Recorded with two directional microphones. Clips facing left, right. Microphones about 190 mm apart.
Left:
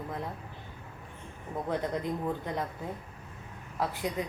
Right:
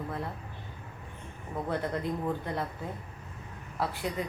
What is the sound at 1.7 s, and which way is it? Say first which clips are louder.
Speech: even; 15° left (ahead or behind).